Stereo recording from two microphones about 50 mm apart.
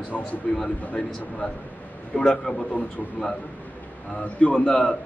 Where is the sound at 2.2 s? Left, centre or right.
Centre.